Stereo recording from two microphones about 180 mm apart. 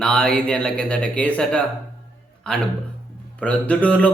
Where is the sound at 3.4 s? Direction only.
10° left (ahead or behind).